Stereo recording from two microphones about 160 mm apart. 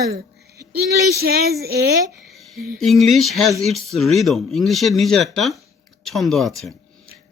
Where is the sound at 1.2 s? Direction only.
70° right (ahead or behind).